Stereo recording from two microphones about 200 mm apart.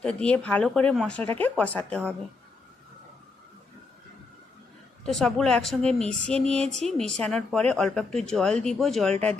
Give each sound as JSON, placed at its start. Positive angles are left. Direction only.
{"t": 0.0, "sound": "a woman's voice", "side_deg": 5}
{"t": 5.0, "sound": "a woman's voice", "side_deg": 0}